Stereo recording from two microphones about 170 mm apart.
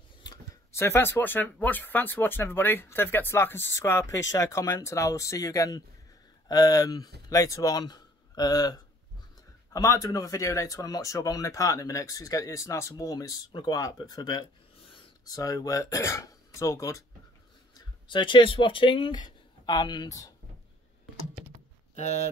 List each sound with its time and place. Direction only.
0.2 s speech: 20° left (ahead or behind)
17.7 s speech: 30° left (ahead or behind)
21.9 s speech: 40° left (ahead or behind)